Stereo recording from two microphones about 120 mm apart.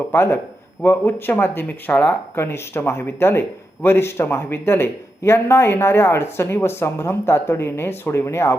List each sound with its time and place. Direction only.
0.1 s speech: 20° left (ahead or behind)